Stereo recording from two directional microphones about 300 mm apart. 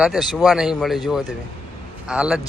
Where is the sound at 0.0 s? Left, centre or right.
Centre.